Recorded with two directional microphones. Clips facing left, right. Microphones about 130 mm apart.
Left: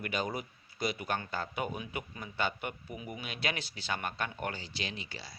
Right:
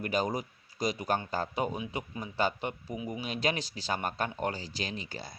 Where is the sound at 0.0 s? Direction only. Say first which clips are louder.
Right 4 dB; 40° right (ahead or behind).